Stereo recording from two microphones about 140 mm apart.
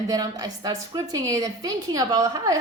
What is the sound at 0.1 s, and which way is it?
A woman's voice, 25° right (ahead or behind).